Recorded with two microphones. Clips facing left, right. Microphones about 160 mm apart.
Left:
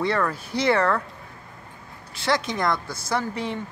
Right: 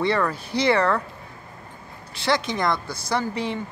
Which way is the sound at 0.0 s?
Centre (ahead or behind).